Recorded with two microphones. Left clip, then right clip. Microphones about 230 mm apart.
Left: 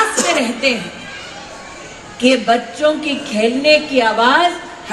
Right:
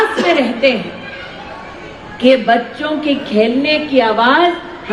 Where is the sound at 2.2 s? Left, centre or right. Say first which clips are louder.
Right 3 dB; left.